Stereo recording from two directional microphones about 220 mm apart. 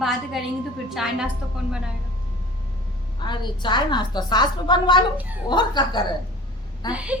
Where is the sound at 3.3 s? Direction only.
20° left (ahead or behind).